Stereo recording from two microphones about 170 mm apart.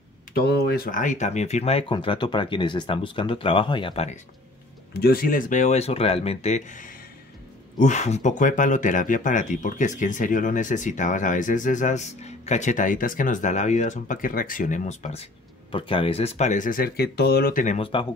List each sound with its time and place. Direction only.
0.3 s speech: 70° left (ahead or behind); by 4.2 s 35° left (ahead or behind)
5.0 s speech: 60° left (ahead or behind)
17.7 s speech: 30° left (ahead or behind)